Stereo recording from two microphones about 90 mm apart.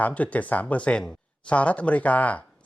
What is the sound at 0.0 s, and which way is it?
Speech, 15° left (ahead or behind).